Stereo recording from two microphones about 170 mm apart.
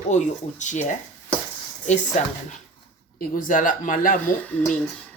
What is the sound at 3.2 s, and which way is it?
Speech, 55° left (ahead or behind).